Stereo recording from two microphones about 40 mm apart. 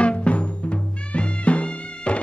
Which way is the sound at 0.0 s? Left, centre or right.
Left.